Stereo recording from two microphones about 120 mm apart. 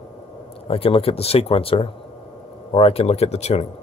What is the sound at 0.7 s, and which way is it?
Speech, 55° left (ahead or behind).